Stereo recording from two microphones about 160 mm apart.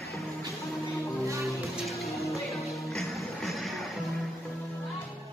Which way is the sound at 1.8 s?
Centre (ahead or behind).